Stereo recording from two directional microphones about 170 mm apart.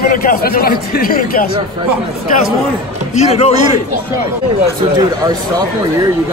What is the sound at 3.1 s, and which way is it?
Speech, 40° left (ahead or behind).